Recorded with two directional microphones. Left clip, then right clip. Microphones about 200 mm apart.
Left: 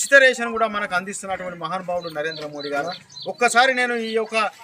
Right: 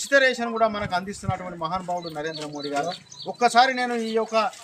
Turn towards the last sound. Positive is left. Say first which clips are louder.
# left 1 dB
turn(degrees=5)  # may be behind; listen again after turning